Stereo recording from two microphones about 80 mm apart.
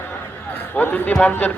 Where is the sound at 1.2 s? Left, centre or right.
Left.